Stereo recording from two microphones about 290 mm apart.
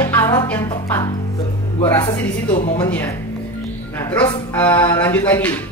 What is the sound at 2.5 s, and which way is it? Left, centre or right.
Speech, left.